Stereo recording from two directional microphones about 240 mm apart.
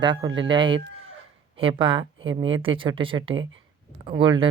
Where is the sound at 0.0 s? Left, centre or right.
Centre.